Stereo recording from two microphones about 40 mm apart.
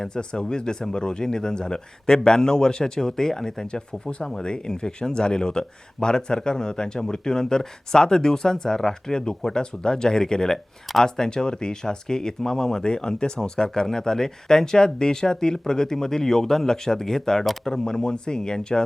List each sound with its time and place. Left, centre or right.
0.1 s speech: left